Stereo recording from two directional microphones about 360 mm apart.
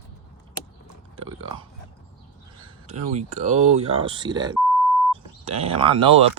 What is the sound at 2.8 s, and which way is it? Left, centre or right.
Speech, centre.